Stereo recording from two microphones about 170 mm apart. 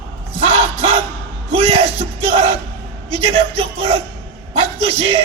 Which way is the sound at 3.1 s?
35° right (ahead or behind).